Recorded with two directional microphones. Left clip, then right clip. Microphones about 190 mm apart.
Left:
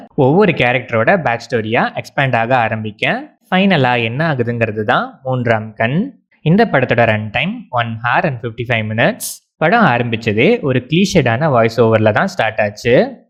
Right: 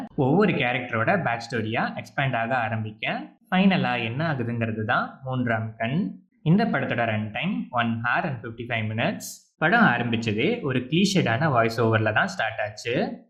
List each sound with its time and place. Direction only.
0.2 s speech: 40° left (ahead or behind)
5.2 s speech: 35° left (ahead or behind)
5.5 s speech: 50° left (ahead or behind)